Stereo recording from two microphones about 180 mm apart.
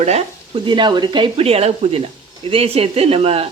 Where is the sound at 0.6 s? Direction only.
25° right (ahead or behind).